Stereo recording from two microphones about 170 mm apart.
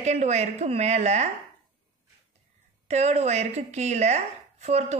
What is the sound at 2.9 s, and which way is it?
Speech, 40° right (ahead or behind).